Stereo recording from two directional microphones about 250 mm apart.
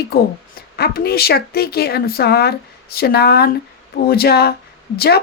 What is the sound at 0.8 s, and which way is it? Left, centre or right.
Speech, left.